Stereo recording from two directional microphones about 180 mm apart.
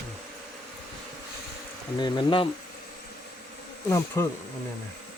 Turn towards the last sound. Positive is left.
turn(degrees=15)  # may be behind; listen again after turning